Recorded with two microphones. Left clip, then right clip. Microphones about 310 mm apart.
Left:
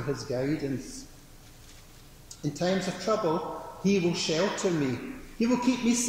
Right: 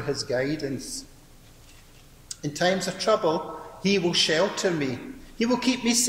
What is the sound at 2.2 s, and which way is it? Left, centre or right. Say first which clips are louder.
A man's voice: right 5 dB; right.